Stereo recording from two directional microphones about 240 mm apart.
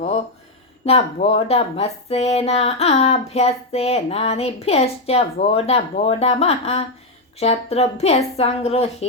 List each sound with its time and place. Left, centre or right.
0.9 s speech: left